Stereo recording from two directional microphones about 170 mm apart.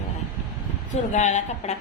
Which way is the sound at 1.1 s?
45° left (ahead or behind).